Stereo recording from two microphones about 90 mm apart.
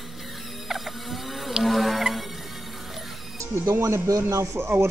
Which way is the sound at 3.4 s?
30° right (ahead or behind).